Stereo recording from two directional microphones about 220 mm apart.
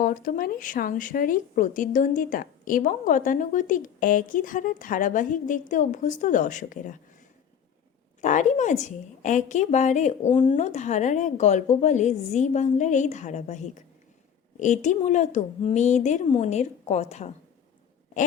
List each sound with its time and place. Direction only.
0.0 s speech: 40° left (ahead or behind)
8.2 s speech: 35° left (ahead or behind)